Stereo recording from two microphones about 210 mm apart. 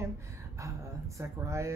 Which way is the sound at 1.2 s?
15° right (ahead or behind).